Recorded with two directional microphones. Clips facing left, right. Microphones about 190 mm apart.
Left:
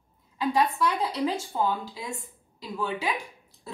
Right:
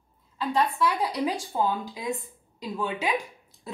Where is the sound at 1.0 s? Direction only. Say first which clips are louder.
Even; 15° right (ahead or behind).